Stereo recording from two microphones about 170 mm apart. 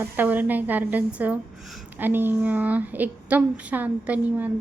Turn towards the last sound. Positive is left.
turn(degrees=-10)  # may be behind; listen again after turning